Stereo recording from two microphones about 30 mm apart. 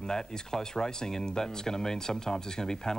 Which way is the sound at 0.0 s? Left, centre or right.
Centre.